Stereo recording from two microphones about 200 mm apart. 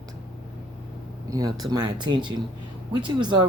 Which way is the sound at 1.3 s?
20° right (ahead or behind).